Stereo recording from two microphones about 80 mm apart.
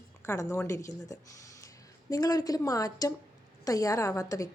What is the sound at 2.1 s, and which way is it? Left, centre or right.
A woman's voice, left.